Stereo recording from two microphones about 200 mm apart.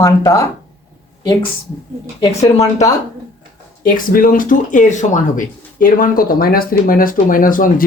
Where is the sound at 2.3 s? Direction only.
30° left (ahead or behind).